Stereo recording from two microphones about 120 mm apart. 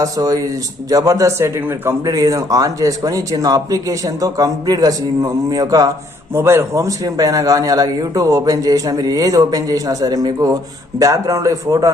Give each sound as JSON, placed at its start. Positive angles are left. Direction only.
{"t": 0.0, "sound": "a man's voice", "side_deg": -30}
{"t": 2.0, "sound": "speech", "side_deg": -30}
{"t": 6.3, "sound": "a man's voice", "side_deg": -20}